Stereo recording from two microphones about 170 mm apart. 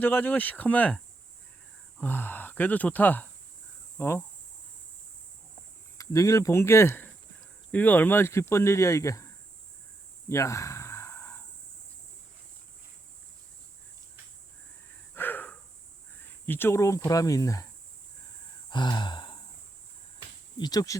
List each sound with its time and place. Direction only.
0.0 s speech: 10° left (ahead or behind)
6.0 s speech: 20° left (ahead or behind)
10.2 s a sound: 15° left (ahead or behind)
15.1 s a sound: 10° left (ahead or behind)
16.2 s speech: 10° left (ahead or behind)
18.7 s sigh: 25° left (ahead or behind)
20.6 s speech: 20° left (ahead or behind)